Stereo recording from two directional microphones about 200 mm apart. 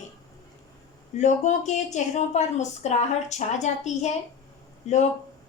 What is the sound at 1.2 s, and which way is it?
A woman's voice, 35° left (ahead or behind).